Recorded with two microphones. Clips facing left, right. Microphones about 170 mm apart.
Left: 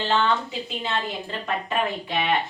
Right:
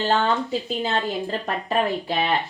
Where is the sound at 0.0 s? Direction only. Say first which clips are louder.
Right 2 dB; 40° right (ahead or behind).